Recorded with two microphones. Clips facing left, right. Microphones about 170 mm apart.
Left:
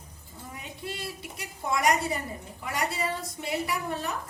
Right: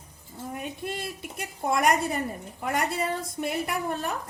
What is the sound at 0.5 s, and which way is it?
A woman's voice, 55° right (ahead or behind).